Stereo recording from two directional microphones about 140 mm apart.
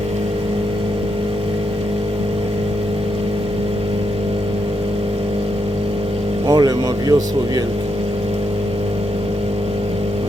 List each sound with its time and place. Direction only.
6.5 s speech: 30° right (ahead or behind)